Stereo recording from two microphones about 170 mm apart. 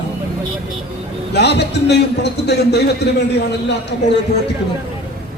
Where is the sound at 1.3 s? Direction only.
80° left.